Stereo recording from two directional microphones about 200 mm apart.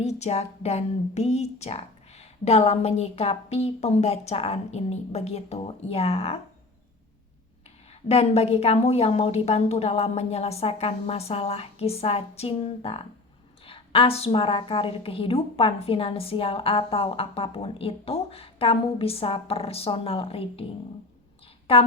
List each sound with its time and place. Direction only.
0.0 s speech: 35° left (ahead or behind)
7.9 s a woman's voice: 30° left (ahead or behind)
21.4 s a sound: 30° left (ahead or behind)